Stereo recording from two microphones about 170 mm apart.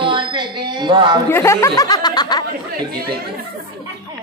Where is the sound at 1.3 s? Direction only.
15° left (ahead or behind).